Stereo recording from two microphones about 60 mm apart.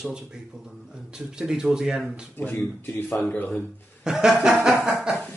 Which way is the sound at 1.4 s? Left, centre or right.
Centre.